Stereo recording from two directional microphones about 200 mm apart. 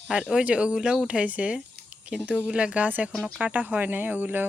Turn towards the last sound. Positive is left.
turn(degrees=-10)  # may be behind; listen again after turning